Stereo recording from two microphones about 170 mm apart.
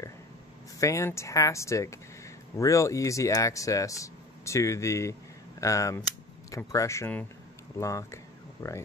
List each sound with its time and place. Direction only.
0.7 s speech: 20° left (ahead or behind)